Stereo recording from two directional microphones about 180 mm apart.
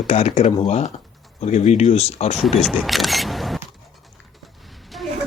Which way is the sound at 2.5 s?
Centre (ahead or behind).